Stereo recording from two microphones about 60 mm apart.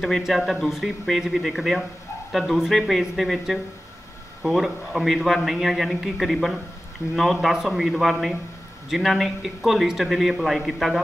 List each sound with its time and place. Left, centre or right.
0.3 s a man's voice: centre